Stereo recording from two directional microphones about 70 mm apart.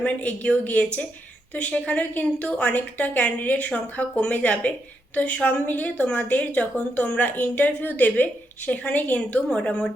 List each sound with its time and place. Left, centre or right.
0.0 s a woman's voice: left